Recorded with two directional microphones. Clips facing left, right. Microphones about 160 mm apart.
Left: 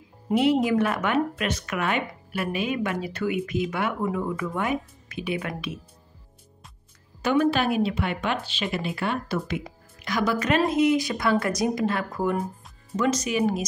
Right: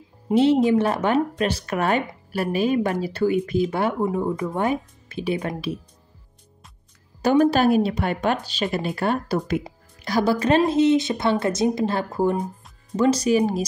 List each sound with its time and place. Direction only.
0.3 s speech: 30° right (ahead or behind)
7.2 s speech: 35° right (ahead or behind)